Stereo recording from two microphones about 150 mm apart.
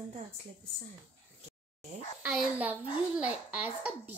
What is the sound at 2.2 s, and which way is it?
A child's voice, 10° right (ahead or behind).